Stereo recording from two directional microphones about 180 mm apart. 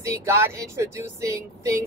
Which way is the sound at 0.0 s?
15° right (ahead or behind).